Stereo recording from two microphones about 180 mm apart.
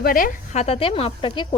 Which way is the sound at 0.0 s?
50° left (ahead or behind).